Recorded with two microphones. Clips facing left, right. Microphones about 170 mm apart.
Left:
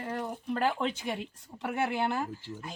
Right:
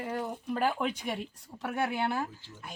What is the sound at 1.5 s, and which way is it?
Speech, 5° left (ahead or behind).